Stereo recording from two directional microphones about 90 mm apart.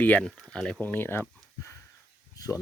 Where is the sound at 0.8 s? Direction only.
20° left (ahead or behind).